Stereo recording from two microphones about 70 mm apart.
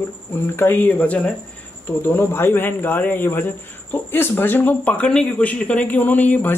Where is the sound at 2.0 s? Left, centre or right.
Left.